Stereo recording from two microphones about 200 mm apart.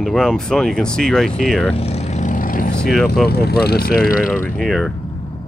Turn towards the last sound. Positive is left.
turn(degrees=0)  # may be behind; listen again after turning